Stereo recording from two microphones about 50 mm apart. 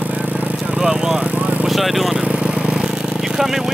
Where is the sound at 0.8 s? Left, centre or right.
Right.